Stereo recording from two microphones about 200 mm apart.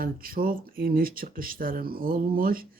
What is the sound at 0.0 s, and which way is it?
Speech, 45° right (ahead or behind).